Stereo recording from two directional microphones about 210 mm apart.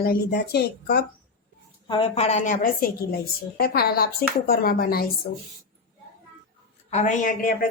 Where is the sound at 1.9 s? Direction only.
25° left (ahead or behind).